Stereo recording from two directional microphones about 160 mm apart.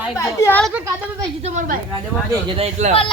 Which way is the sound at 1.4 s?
40° right (ahead or behind).